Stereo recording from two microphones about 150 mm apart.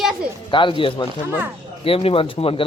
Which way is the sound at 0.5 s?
35° left (ahead or behind).